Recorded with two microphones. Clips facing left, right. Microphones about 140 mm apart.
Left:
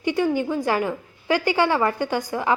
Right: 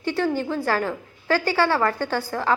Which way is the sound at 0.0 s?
15° left (ahead or behind).